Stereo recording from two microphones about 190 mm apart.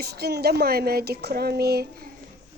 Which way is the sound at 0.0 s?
55° right (ahead or behind).